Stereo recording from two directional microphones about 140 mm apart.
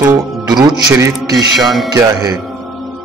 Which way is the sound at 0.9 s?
25° right (ahead or behind).